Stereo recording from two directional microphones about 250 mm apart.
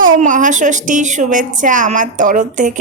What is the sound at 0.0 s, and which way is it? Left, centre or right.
A woman's voice, right.